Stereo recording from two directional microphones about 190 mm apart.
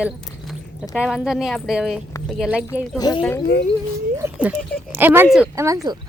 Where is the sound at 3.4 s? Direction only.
60° left (ahead or behind).